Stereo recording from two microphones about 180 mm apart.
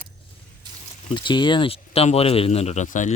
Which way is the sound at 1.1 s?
25° left (ahead or behind).